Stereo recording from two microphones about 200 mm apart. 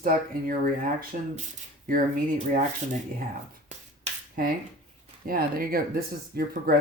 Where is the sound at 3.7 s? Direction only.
40° right (ahead or behind).